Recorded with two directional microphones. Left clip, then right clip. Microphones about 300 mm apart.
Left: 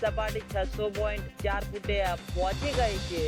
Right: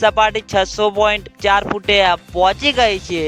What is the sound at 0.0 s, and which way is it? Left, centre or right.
Speech, right.